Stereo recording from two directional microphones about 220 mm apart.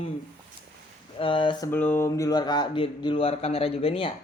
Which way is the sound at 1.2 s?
25° left (ahead or behind).